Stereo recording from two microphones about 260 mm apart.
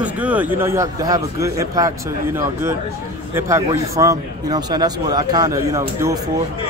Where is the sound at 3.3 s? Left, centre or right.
Centre.